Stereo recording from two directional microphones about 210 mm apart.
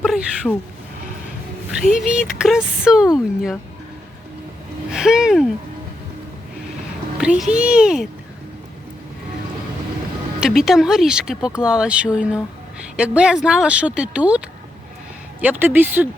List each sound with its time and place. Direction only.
0.0 s a sound: centre (ahead or behind)
1.9 s speech: 5° right (ahead or behind)
4.9 s speech: 5° right (ahead or behind)
7.2 s speech: 5° right (ahead or behind)
10.4 s speech: centre (ahead or behind)